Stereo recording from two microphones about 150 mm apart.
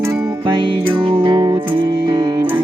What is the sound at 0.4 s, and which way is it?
Music, 30° right (ahead or behind).